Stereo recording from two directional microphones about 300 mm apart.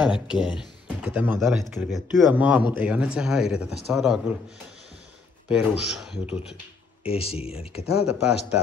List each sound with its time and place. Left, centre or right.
0.1 s speech: centre
5.5 s speech: centre
7.0 s speech: centre
7.9 s speech: centre